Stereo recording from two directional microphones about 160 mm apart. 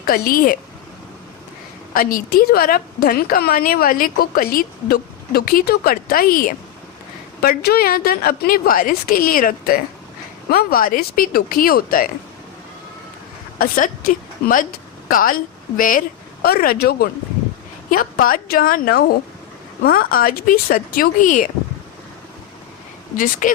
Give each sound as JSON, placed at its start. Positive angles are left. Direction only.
{"t": 0.1, "sound": "a woman's voice", "side_deg": 65}
{"t": 1.9, "sound": "a woman's voice", "side_deg": 65}
{"t": 7.4, "sound": "a woman's voice", "side_deg": 75}
{"t": 13.6, "sound": "a woman's voice", "side_deg": 55}
{"t": 17.9, "sound": "a woman's voice", "side_deg": 65}
{"t": 23.1, "sound": "a woman's voice", "side_deg": 60}